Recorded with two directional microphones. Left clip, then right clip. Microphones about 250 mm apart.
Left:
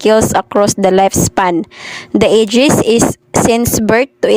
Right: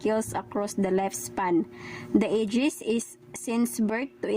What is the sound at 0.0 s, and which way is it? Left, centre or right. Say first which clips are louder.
A woman's voice: left 18 dB; left.